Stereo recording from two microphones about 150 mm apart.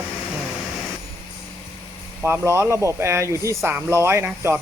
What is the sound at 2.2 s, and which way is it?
Speech, 15° right (ahead or behind).